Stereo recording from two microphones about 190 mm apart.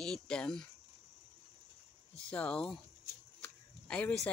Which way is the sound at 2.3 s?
5° left (ahead or behind).